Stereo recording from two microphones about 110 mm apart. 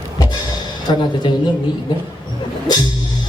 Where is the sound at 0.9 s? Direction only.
40° left (ahead or behind).